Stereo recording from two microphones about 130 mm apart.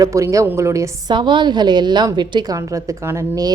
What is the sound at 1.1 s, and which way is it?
A woman's voice, 35° right (ahead or behind).